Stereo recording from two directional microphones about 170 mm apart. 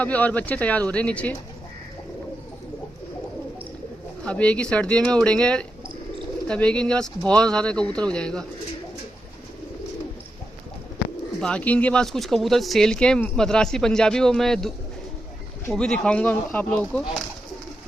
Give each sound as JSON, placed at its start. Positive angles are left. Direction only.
{"t": 0.0, "sound": "speech", "side_deg": 10}
{"t": 4.2, "sound": "speech", "side_deg": 5}
{"t": 11.3, "sound": "speech", "side_deg": 5}
{"t": 15.7, "sound": "speech", "side_deg": 5}